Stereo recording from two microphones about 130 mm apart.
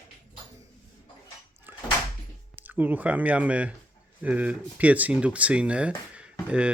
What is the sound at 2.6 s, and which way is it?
Speech, 15° right (ahead or behind).